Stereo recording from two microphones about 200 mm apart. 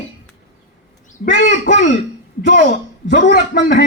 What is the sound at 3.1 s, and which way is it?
Speech, 55° left (ahead or behind).